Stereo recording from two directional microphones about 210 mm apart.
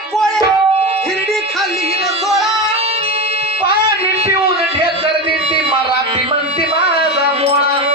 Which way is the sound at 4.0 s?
30° right (ahead or behind).